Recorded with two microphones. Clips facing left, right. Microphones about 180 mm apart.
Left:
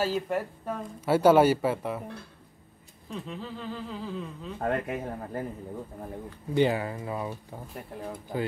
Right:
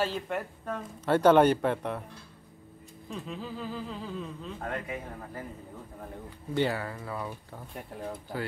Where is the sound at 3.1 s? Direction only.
Centre (ahead or behind).